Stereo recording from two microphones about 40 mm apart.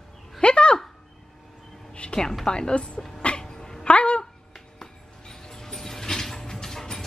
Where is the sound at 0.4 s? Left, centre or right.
Left.